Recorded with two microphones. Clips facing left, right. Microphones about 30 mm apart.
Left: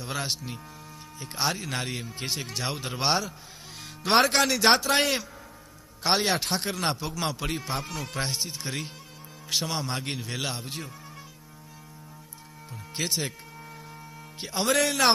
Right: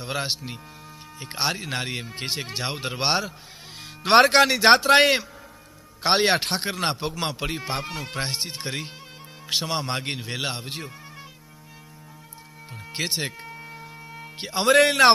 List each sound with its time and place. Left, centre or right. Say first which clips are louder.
0.0 s speech: right 3 dB; right
4.0 s speech: right 6 dB; right
6.0 s speech: right 5 dB; right
7.9 s speech: right 2 dB; right
8.4 s speech: right 3 dB; right
9.5 s speech: right 3 dB; right
13.0 s a sound: right 2 dB; right
14.4 s speech: right 3 dB; right
14.7 s speech: right 7 dB; right